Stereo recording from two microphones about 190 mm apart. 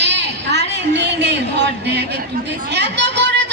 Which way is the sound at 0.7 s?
65° right (ahead or behind).